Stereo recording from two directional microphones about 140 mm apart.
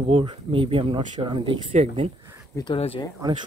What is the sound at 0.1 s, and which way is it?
Speech, 35° right (ahead or behind).